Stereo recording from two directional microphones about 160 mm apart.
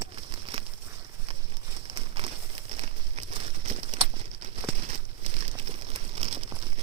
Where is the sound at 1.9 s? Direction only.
35° right (ahead or behind).